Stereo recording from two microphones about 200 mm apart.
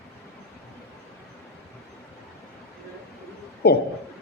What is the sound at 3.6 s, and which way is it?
Speech, 55° left (ahead or behind).